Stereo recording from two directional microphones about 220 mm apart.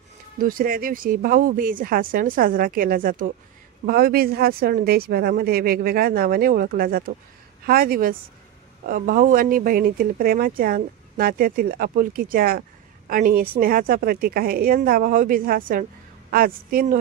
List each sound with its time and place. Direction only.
0.4 s speech: 40° right (ahead or behind)